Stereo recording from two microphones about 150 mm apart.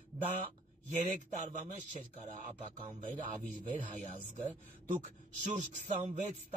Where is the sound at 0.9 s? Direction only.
55° right (ahead or behind).